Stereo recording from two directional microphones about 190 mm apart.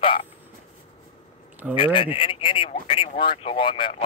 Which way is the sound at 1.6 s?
5° right (ahead or behind).